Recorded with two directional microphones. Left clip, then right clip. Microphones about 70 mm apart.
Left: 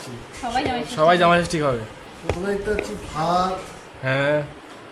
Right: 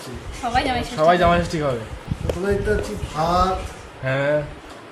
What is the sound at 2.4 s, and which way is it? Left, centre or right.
Speech, centre.